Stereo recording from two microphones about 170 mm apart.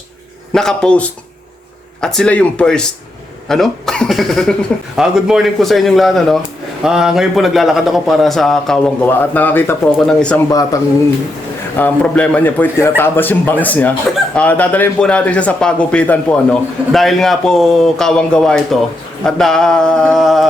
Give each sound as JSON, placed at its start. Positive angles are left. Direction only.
{"t": 0.5, "sound": "a man's voice", "side_deg": 5}
{"t": 10.5, "sound": "speech", "side_deg": 20}
{"t": 11.8, "sound": "a man's voice", "side_deg": 5}